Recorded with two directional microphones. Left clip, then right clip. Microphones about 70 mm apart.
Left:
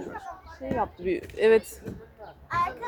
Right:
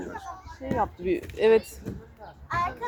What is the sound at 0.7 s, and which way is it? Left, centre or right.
Speech, centre.